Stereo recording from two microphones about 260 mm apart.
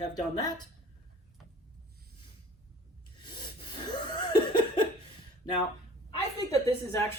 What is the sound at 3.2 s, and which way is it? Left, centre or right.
Cough, centre.